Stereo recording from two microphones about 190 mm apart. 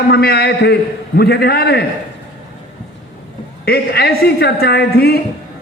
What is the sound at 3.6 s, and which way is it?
A man's voice, 55° left (ahead or behind).